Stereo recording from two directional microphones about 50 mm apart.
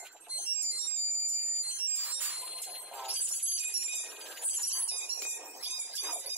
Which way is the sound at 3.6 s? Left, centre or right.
Right.